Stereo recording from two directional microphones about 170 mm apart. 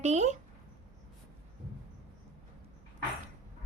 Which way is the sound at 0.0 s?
40° right (ahead or behind).